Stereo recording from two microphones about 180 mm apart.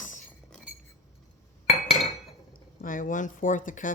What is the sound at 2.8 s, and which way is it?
Speech, 50° left (ahead or behind).